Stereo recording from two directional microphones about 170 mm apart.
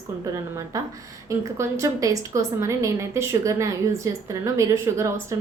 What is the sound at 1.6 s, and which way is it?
A woman's voice, 20° right (ahead or behind).